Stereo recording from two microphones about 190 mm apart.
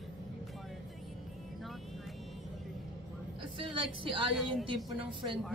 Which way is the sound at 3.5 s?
25° right (ahead or behind).